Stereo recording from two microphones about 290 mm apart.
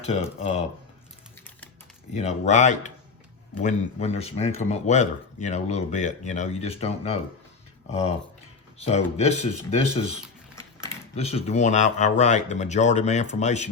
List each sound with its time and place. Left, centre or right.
0.0 s speech: left
2.1 s speech: left
8.8 s speech: left
11.1 s speech: left